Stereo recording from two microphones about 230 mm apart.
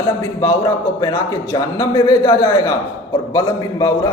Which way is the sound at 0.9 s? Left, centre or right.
Centre.